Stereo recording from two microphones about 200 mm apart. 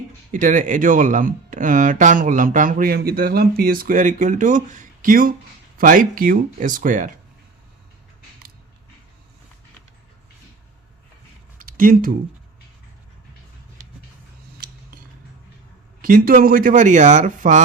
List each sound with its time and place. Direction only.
0.3 s speech: 40° right (ahead or behind)
11.5 s a sound: 45° right (ahead or behind)
16.0 s speech: 45° right (ahead or behind)